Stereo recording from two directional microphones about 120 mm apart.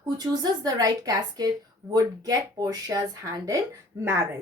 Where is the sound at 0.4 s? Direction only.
30° right (ahead or behind).